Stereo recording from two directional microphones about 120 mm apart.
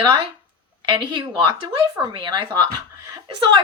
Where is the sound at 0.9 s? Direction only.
40° right (ahead or behind).